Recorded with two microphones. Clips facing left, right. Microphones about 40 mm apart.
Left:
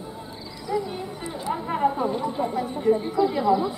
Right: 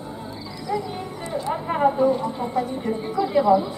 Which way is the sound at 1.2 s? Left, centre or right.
Centre.